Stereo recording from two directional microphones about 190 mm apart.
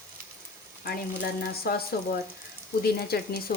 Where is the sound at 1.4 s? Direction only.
55° left (ahead or behind).